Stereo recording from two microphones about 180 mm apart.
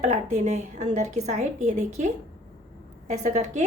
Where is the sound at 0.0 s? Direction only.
40° right (ahead or behind).